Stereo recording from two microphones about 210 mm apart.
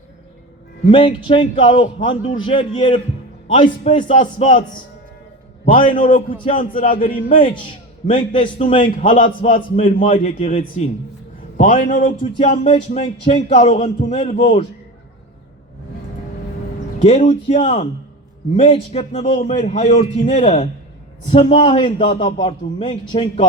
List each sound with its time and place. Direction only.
0.9 s a man's voice: 25° left (ahead or behind)
5.9 s speech: 40° left (ahead or behind)
8.3 s a man's voice: 25° left (ahead or behind)
9.0 s speech: 35° left (ahead or behind)
12.4 s speech: 25° left (ahead or behind)
17.1 s a man's voice: 35° left (ahead or behind)